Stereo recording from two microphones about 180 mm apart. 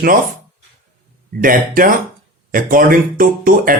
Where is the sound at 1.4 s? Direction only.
50° right (ahead or behind).